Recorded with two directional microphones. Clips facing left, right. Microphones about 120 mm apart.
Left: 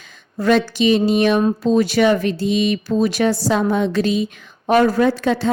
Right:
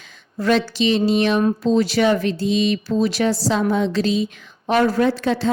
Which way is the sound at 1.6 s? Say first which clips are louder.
Left 3 dB; 55° left (ahead or behind).